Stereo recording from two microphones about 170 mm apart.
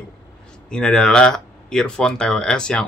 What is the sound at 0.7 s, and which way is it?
Speech, 5° left (ahead or behind).